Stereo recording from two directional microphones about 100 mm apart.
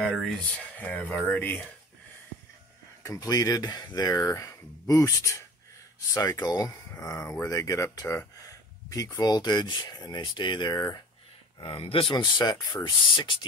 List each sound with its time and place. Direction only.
0.0 s speech: 10° left (ahead or behind)
3.0 s speech: 35° left (ahead or behind)
9.2 s speech: 45° left (ahead or behind)
11.6 s speech: 65° left (ahead or behind)
12.1 s speech: 45° left (ahead or behind)